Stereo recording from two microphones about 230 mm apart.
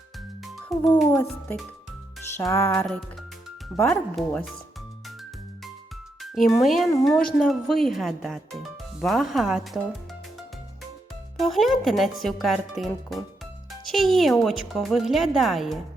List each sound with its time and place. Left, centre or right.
0.7 s music: centre
1.1 s music: centre
3.8 s speech: centre
6.2 s music: centre
6.6 s speech: centre
11.3 s speech: centre